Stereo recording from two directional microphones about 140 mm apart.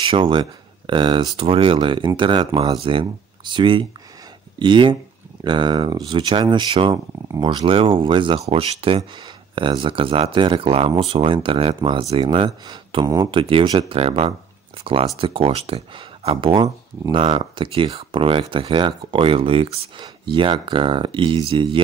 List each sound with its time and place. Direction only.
0.0 s speech: 35° right (ahead or behind)
13.3 s speech: 40° right (ahead or behind)